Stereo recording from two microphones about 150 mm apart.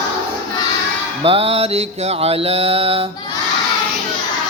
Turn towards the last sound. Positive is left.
turn(degrees=-40)  # may be behind; listen again after turning